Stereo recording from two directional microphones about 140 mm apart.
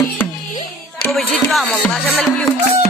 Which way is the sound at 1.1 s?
Centre (ahead or behind).